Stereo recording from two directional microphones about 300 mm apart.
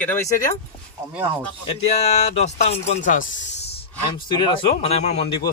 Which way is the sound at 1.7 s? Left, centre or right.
Left.